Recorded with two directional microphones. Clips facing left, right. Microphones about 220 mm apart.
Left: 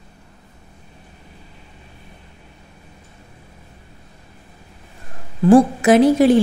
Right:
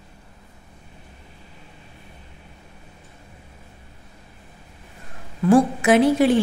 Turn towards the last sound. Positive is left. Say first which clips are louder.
# left 4 dB
turn(degrees=40)  # may be behind; listen again after turning